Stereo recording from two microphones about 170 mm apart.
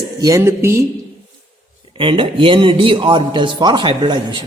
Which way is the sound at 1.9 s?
30° right (ahead or behind).